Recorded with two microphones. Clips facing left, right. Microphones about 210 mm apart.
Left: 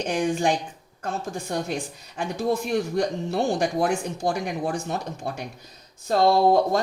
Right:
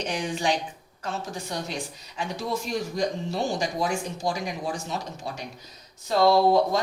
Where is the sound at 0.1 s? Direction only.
50° left (ahead or behind).